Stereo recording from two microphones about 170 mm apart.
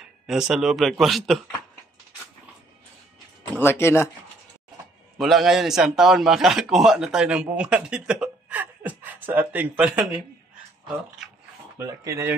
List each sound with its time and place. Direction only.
0.3 s a man's voice: 5° right (ahead or behind)
3.5 s speech: 15° left (ahead or behind)
5.1 s a man's voice: centre (ahead or behind)
11.8 s speech: 20° right (ahead or behind)